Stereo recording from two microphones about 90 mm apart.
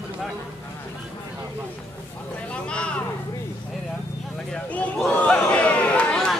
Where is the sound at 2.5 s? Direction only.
10° left (ahead or behind).